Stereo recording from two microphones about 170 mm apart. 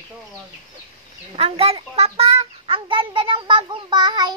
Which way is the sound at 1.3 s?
35° right (ahead or behind).